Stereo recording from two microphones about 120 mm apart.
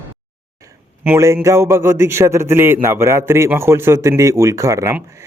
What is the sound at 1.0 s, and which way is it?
A man's voice, 20° right (ahead or behind).